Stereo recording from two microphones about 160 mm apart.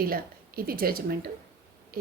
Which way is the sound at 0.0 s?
65° right (ahead or behind).